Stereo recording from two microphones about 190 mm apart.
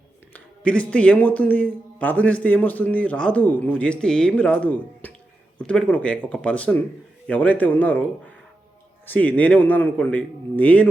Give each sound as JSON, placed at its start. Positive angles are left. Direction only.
{"t": 0.3, "sound": "speech", "side_deg": 5}
{"t": 9.0, "sound": "speech", "side_deg": 10}